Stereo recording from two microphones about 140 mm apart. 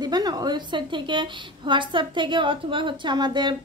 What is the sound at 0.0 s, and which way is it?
A woman's voice, 30° right (ahead or behind).